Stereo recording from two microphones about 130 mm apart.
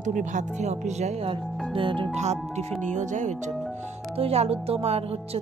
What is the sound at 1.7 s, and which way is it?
Speech, 40° right (ahead or behind).